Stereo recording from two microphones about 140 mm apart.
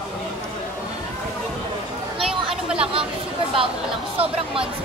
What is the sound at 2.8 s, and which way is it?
Chatter, 40° right (ahead or behind).